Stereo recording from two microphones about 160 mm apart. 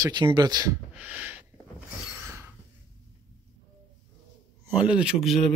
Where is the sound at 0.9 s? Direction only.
10° right (ahead or behind).